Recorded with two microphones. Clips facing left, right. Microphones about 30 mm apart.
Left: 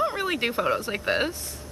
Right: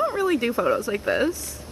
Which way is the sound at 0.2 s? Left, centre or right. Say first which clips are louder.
Right 4 dB; left.